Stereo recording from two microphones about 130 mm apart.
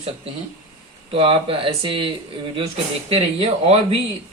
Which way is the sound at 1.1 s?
45° right (ahead or behind).